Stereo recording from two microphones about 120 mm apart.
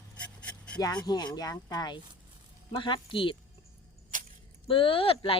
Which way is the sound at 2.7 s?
45° left (ahead or behind).